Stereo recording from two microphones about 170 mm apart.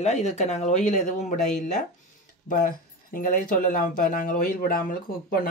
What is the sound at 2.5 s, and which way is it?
Speech, 55° left (ahead or behind).